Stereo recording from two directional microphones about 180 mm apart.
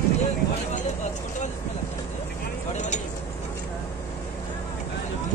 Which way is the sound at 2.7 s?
40° left (ahead or behind).